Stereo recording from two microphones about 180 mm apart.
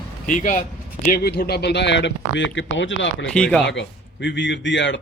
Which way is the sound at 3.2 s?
5° left (ahead or behind).